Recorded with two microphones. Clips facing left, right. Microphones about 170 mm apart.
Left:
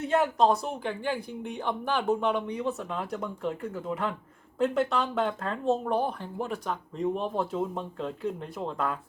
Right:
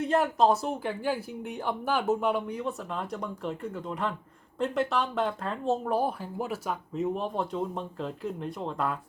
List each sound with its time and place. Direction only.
0.1 s speech: centre (ahead or behind)